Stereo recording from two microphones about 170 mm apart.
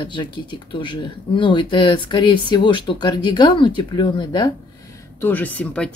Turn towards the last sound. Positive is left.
turn(degrees=5)  # may be behind; listen again after turning